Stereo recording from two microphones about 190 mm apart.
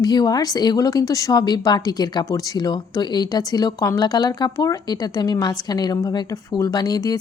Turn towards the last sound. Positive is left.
turn(degrees=20)  # may be behind; listen again after turning